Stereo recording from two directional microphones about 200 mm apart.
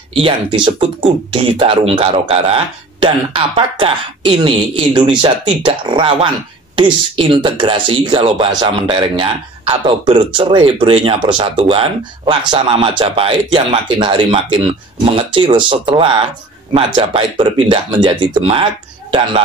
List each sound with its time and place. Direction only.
0.1 s speech: 25° right (ahead or behind)